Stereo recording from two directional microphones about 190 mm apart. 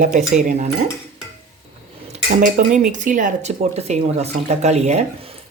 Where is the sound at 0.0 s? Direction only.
40° right (ahead or behind).